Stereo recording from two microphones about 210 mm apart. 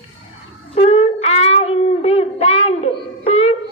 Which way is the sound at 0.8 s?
30° left (ahead or behind).